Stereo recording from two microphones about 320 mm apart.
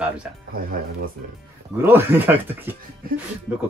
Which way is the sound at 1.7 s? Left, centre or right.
Centre.